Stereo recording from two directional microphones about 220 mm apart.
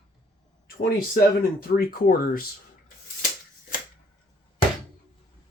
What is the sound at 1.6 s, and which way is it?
Speech, 45° left (ahead or behind).